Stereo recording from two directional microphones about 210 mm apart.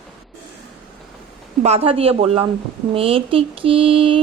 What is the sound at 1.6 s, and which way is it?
A woman's voice, 30° right (ahead or behind).